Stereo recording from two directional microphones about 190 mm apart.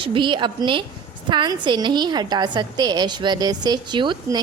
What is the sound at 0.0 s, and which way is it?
A woman's voice, 25° right (ahead or behind).